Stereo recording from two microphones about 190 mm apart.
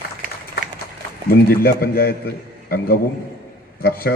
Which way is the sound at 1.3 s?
55° left (ahead or behind).